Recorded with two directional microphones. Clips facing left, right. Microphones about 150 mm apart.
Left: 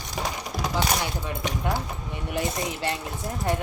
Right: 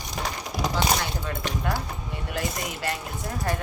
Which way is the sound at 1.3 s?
20° left (ahead or behind).